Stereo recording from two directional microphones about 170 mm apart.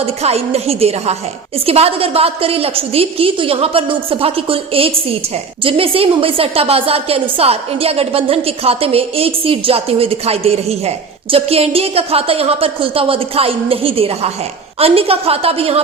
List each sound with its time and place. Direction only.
0.0 s a woman's voice: 35° right (ahead or behind)